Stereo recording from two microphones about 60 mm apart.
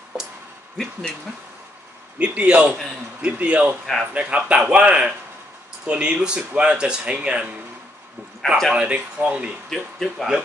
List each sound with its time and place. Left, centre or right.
2.1 s a man's voice: right
3.8 s speech: centre
4.1 s a man's voice: centre
8.4 s a man's voice: centre
8.7 s a man's voice: right
9.7 s speech: centre